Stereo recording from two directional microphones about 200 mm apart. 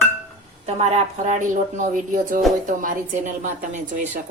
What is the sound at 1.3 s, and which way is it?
Speech, 40° right (ahead or behind).